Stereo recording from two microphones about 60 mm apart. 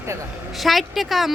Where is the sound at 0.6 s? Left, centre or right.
Centre.